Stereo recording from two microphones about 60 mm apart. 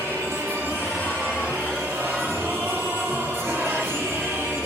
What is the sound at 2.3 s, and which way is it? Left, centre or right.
Music, right.